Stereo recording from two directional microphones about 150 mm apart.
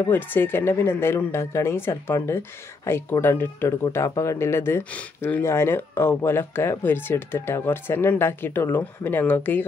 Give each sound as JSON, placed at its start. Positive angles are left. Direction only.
{"t": 0.1, "sound": "speech", "side_deg": 15}